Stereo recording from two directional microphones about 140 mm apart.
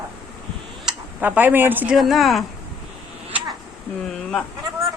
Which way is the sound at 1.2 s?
15° right (ahead or behind).